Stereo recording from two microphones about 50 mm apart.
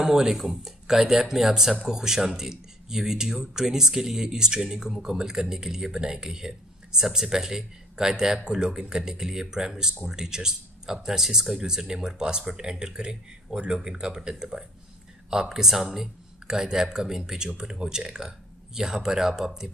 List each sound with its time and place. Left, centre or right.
0.0 s speech: centre